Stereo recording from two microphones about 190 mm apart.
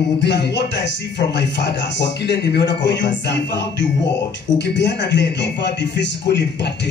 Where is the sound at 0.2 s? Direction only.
65° left (ahead or behind).